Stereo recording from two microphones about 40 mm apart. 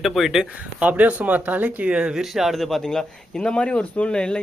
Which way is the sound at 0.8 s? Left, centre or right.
Right.